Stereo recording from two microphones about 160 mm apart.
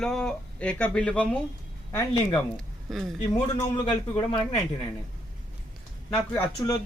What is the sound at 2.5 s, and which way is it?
Speech, centre (ahead or behind).